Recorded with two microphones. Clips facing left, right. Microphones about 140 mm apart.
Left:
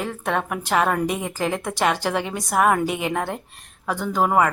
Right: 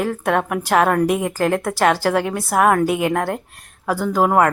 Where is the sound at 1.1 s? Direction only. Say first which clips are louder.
Right 6 dB; 65° right (ahead or behind).